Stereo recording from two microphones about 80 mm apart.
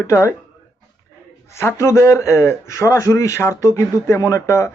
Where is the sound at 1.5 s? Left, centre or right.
Left.